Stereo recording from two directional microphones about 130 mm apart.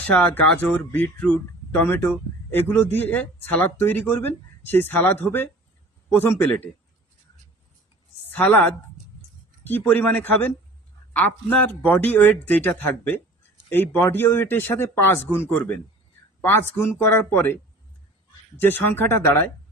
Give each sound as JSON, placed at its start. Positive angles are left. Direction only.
{"t": 0.1, "sound": "a man's voice", "side_deg": 15}
{"t": 8.3, "sound": "a woman's voice", "side_deg": 15}